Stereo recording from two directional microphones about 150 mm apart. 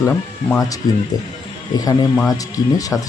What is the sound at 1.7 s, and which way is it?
A man's voice, 25° left (ahead or behind).